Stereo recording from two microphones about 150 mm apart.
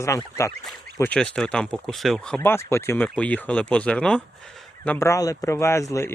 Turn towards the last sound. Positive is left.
turn(degrees=20)  # may be behind; listen again after turning